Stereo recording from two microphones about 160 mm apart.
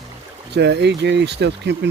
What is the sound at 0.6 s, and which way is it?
Speech, 90° right.